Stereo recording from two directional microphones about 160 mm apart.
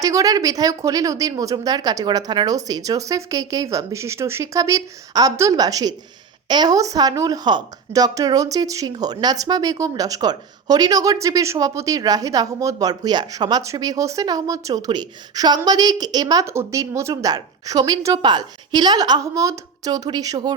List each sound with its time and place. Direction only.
0.0 s a woman's voice: 20° right (ahead or behind)